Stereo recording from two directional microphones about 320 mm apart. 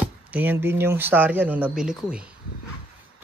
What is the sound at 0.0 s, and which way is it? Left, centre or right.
Speech, centre.